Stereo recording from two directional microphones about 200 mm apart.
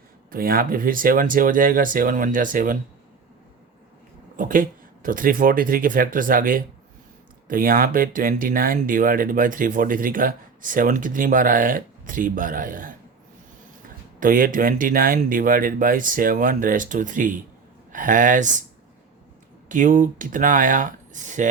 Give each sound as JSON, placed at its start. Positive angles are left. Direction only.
{"t": 0.3, "sound": "speech", "side_deg": -45}
{"t": 4.4, "sound": "speech", "side_deg": -40}
{"t": 14.2, "sound": "speech", "side_deg": -45}
{"t": 19.6, "sound": "speech", "side_deg": -40}